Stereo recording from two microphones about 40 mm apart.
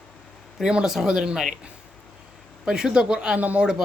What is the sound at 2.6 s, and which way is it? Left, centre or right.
Speech, centre.